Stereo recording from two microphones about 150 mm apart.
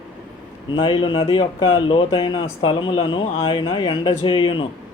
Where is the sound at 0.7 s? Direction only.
35° left (ahead or behind).